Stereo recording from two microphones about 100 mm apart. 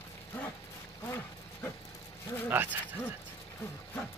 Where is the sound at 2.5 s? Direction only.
20° right (ahead or behind).